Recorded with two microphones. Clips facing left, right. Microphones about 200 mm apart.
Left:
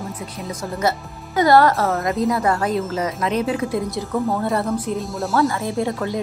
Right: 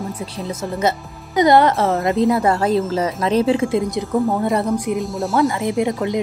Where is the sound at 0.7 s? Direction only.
20° right (ahead or behind).